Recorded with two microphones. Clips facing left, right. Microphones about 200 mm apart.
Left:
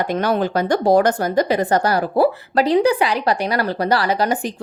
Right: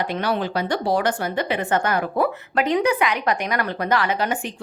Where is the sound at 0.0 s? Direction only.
45° left (ahead or behind).